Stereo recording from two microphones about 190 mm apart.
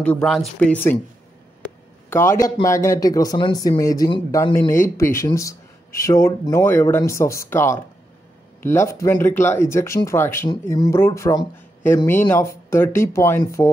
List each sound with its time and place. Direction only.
0.0 s speech: 5° left (ahead or behind)